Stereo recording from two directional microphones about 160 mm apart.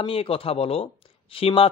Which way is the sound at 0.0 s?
35° left (ahead or behind).